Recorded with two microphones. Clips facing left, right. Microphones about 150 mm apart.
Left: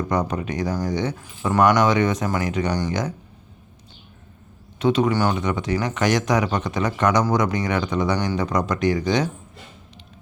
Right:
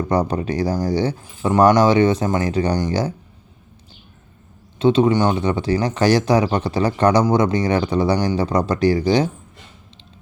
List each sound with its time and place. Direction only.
0.1 s speech: 30° right (ahead or behind)
4.8 s speech: 25° right (ahead or behind)